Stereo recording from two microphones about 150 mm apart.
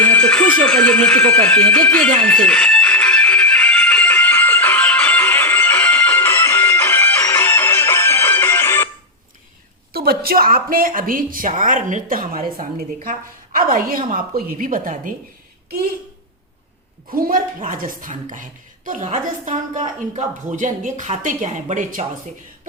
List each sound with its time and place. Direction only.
0.0 s music: 10° left (ahead or behind)
9.9 s a woman's voice: 85° right; by 15.1 s 65° right (ahead or behind)
17.1 s a woman's voice: 70° right (ahead or behind); by 22.0 s 55° right (ahead or behind)